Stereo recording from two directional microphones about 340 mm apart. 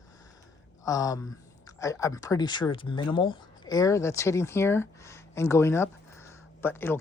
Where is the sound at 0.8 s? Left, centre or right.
Centre.